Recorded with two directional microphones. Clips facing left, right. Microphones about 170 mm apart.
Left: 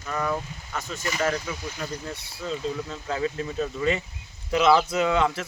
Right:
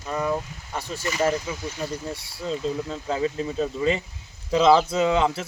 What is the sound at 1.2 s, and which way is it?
Speech, 20° right (ahead or behind).